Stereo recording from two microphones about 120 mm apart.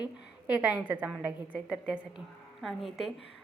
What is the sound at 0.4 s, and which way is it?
Speech, 15° right (ahead or behind).